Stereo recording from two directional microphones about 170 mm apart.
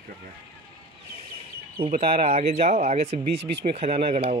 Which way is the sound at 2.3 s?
40° right (ahead or behind).